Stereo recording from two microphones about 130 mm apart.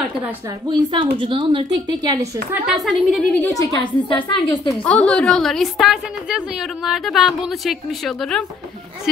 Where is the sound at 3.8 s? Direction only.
35° left (ahead or behind).